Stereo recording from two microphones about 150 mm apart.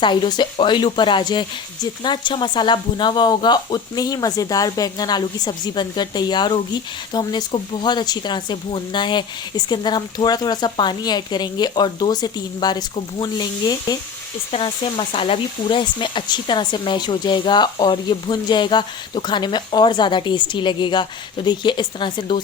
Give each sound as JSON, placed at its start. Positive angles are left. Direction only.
{"t": 0.0, "sound": "speech", "side_deg": 30}